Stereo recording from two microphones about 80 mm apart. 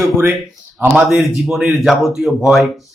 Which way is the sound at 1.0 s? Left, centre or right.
Centre.